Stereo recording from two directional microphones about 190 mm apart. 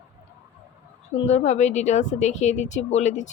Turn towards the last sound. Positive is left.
turn(degrees=35)  # may be behind; listen again after turning